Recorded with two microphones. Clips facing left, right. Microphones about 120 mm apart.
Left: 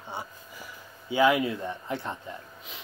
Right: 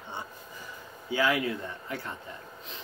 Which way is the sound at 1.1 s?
20° left (ahead or behind).